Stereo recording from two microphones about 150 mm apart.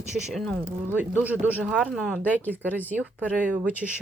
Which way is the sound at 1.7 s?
Centre (ahead or behind).